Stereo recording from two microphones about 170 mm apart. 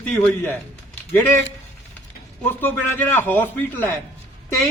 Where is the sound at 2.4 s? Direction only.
10° left (ahead or behind).